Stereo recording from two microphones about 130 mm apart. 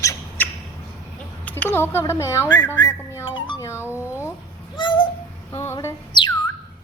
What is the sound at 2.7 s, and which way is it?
Whistling, 25° left (ahead or behind).